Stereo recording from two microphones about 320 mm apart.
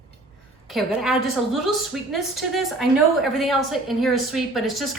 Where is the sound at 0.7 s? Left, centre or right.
Centre.